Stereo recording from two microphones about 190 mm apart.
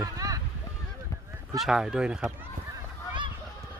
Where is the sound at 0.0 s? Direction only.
20° right (ahead or behind).